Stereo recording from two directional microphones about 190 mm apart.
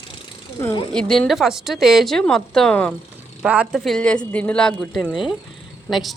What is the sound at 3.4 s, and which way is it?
A woman's voice, 5° right (ahead or behind).